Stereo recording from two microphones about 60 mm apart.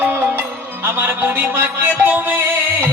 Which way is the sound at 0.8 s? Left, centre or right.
Right.